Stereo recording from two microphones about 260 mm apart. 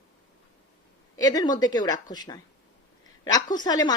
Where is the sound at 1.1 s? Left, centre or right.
Centre.